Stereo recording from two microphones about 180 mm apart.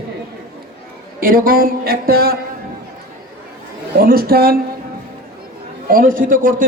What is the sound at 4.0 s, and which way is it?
Speech, 55° right (ahead or behind).